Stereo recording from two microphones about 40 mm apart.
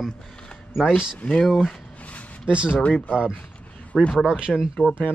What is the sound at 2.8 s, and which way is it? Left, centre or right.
Speech, left.